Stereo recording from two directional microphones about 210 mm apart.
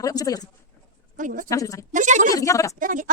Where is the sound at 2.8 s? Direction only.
40° right (ahead or behind).